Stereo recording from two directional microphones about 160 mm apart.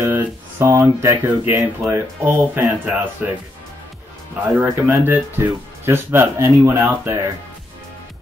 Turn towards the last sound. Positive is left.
turn(degrees=-15)  # may be behind; listen again after turning